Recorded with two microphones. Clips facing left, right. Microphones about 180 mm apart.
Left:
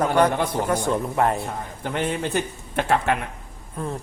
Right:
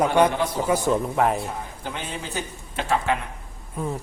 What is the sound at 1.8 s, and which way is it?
Speech, 60° left (ahead or behind).